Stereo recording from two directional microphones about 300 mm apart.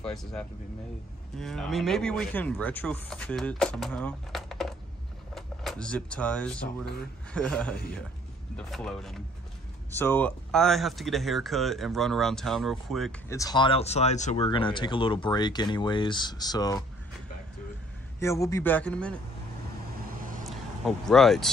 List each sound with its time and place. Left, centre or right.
0.0 s speech: centre
18.2 s speech: centre
20.4 s speech: centre